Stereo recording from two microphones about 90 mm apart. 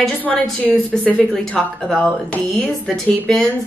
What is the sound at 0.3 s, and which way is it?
Speech, 5° left (ahead or behind).